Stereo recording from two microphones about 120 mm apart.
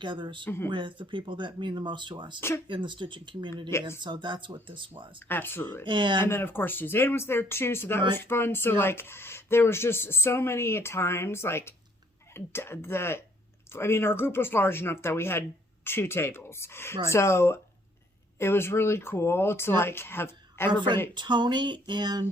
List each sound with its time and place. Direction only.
0.0 s speech: 40° right (ahead or behind)
0.4 s speech: 20° left (ahead or behind)
0.7 s speech: 40° right (ahead or behind)
3.7 s speech: 20° left (ahead or behind)
4.0 s speech: 40° right (ahead or behind)
5.3 s speech: 15° left (ahead or behind)
5.8 s speech: 40° right (ahead or behind)
6.2 s speech: 20° left (ahead or behind)
21.2 s speech: 40° right (ahead or behind)